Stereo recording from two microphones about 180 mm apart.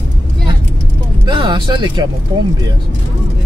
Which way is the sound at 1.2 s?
25° right (ahead or behind).